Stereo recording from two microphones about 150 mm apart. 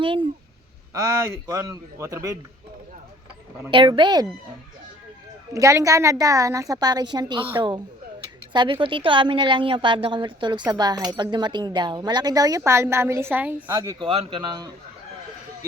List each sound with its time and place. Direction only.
0.0 s a woman's voice: 35° right (ahead or behind)
1.5 s speech: 25° right (ahead or behind)
3.7 s a woman's voice: 35° right (ahead or behind)
5.5 s a woman's voice: 20° right (ahead or behind)
13.8 s a woman's voice: 35° right (ahead or behind)